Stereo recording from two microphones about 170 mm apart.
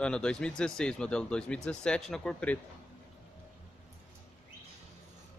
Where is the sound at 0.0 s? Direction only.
5° left (ahead or behind).